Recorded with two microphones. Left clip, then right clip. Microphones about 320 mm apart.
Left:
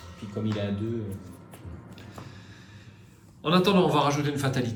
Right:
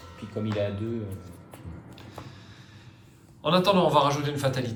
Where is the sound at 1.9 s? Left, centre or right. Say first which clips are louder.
Right 2 dB; centre.